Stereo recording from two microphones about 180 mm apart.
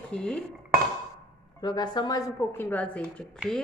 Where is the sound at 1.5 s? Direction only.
25° left (ahead or behind).